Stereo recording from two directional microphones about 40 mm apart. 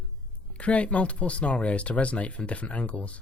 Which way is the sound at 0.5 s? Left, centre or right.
Left.